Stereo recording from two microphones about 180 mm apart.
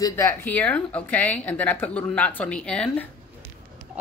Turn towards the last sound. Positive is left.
turn(degrees=5)  # may be behind; listen again after turning